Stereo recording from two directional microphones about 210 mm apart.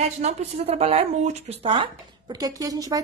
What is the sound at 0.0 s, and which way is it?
A woman's voice, 35° right (ahead or behind).